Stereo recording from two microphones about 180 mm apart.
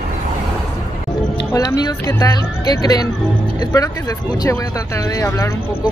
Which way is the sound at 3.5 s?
20° left (ahead or behind).